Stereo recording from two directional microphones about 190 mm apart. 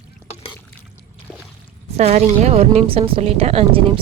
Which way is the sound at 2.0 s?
35° right (ahead or behind).